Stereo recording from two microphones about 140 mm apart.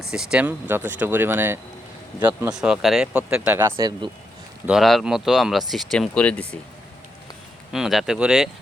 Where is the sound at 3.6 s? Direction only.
30° right (ahead or behind).